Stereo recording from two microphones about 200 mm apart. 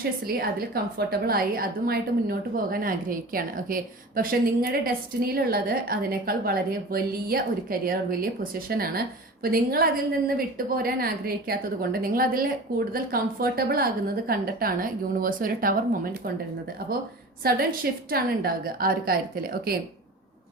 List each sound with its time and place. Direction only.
0.3 s a woman's voice: 50° right (ahead or behind)
17.4 s a woman's voice: 50° right (ahead or behind)